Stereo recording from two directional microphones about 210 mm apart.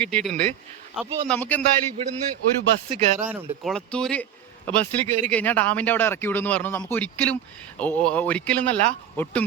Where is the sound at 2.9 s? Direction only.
35° right (ahead or behind).